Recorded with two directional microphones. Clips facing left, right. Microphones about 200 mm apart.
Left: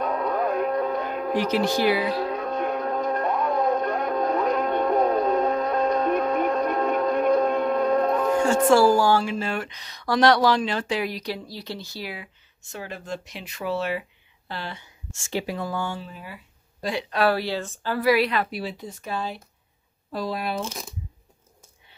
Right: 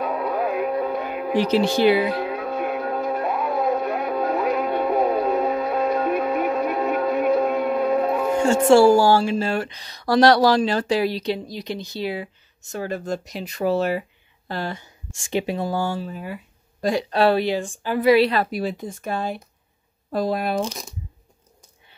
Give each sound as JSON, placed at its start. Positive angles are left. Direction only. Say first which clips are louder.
{"t": 0.0, "sound": "a sound", "louder": "right 1 dB", "side_deg": -10}
{"t": 1.4, "sound": "speech", "louder": "right 5 dB", "side_deg": -30}
{"t": 2.2, "sound": "music", "louder": "right 1 dB", "side_deg": -10}
{"t": 8.6, "sound": "speech", "louder": "right 5 dB", "side_deg": -30}
{"t": 12.6, "sound": "speech", "louder": "right 8 dB", "side_deg": -40}
{"t": 15.1, "sound": "speech", "louder": "right 4 dB", "side_deg": -20}
{"t": 17.1, "sound": "speech", "louder": "right 3 dB", "side_deg": -25}